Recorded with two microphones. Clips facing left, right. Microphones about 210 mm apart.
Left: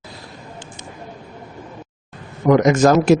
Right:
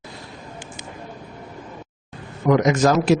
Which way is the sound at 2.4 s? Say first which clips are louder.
Left 4 dB; 50° left (ahead or behind).